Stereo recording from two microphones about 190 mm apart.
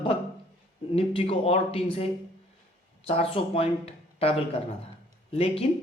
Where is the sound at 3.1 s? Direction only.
30° left (ahead or behind).